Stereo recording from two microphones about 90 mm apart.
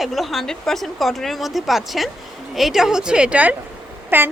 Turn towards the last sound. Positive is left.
turn(degrees=-20)  # may be behind; listen again after turning